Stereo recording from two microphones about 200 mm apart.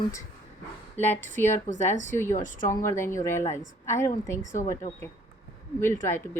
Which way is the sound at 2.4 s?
40° left (ahead or behind).